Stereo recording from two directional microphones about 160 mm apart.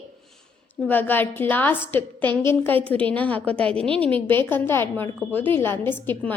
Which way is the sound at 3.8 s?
35° right (ahead or behind).